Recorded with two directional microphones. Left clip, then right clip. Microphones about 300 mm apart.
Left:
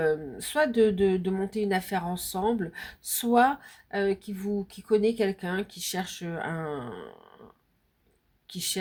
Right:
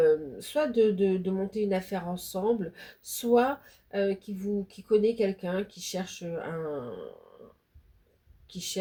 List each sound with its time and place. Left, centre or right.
0.0 s speech: left
8.4 s speech: left